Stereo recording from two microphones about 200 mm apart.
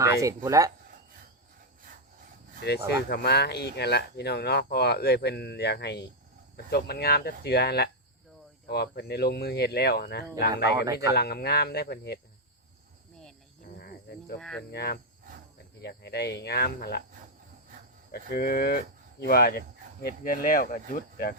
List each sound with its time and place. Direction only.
0.0 s speech: 15° right (ahead or behind)
2.6 s speech: 55° left (ahead or behind)
13.7 s cricket: 50° left (ahead or behind)
14.3 s speech: 5° left (ahead or behind)
14.7 s speech: 50° left (ahead or behind)
18.1 s speech: 50° left (ahead or behind)